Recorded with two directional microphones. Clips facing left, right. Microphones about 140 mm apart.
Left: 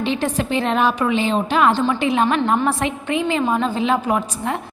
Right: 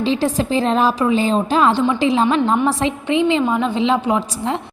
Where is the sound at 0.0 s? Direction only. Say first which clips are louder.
Right 3 dB; 30° right (ahead or behind).